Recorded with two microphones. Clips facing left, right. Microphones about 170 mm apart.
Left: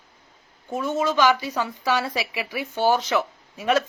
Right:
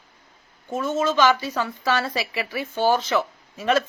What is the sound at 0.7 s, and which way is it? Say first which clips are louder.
A woman's voice: right 1 dB; 15° left (ahead or behind).